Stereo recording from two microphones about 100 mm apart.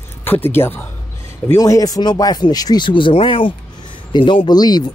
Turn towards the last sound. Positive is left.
turn(degrees=45)  # may be behind; listen again after turning